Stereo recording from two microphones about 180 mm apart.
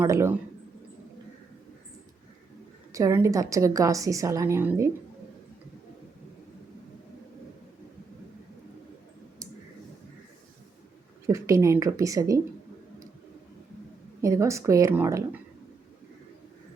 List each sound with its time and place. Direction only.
0.0 s a woman's voice: 15° right (ahead or behind)
2.9 s a woman's voice: 15° right (ahead or behind)
11.3 s a woman's voice: 15° right (ahead or behind)
14.2 s a woman's voice: 15° right (ahead or behind)